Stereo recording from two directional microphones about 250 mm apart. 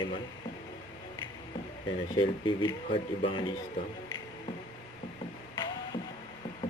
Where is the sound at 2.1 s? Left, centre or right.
Centre.